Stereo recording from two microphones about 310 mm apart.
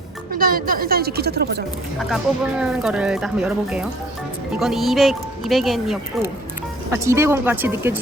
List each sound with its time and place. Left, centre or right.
0.3 s a woman's voice: right
2.0 s speech: centre